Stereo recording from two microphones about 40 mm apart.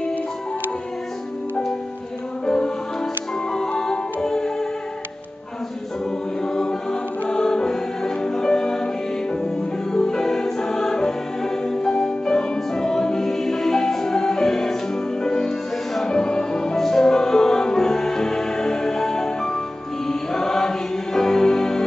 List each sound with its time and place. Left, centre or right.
2.4 s music: centre
6.4 s music: centre